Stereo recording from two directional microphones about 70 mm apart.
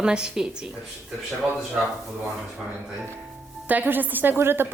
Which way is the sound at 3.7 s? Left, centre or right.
Right.